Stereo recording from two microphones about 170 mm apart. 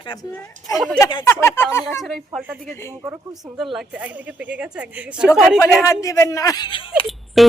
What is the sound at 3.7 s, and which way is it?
A woman's voice, 10° right (ahead or behind).